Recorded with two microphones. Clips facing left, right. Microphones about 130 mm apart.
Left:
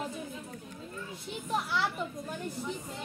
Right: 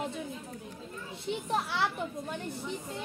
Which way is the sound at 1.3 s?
65° right (ahead or behind).